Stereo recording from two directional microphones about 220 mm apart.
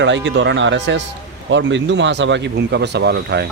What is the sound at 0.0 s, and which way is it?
Speech, 55° right (ahead or behind).